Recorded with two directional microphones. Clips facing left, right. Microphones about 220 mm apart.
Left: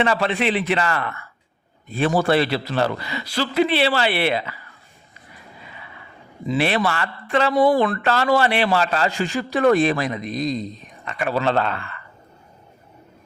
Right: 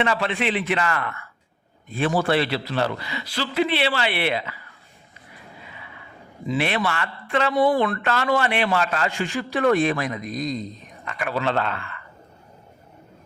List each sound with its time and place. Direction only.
0.0 s a man's voice: 35° left (ahead or behind)
6.5 s a man's voice: 35° left (ahead or behind)